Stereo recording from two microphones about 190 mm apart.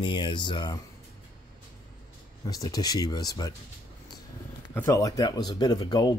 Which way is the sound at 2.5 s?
20° left (ahead or behind).